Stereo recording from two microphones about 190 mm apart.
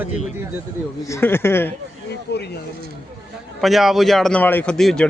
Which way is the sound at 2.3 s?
60° left (ahead or behind).